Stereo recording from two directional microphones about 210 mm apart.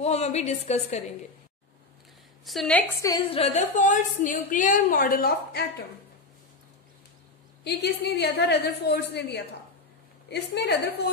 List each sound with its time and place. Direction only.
0.0 s a woman's voice: 30° left (ahead or behind)
2.4 s a woman's voice: centre (ahead or behind)
3.0 s a woman's voice: 20° left (ahead or behind); by 5.7 s 50° left (ahead or behind)
7.6 s a woman's voice: 50° left (ahead or behind)